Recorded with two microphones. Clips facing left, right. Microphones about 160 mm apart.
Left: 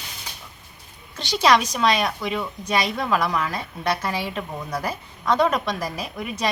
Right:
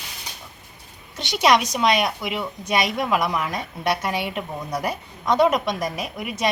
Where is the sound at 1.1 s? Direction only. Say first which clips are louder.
Even; 20° right (ahead or behind).